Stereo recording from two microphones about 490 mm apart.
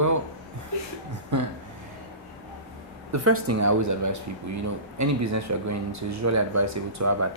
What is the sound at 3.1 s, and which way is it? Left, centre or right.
Speech, right.